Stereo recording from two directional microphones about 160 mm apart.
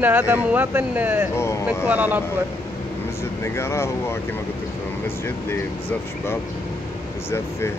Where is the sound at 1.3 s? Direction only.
15° left (ahead or behind).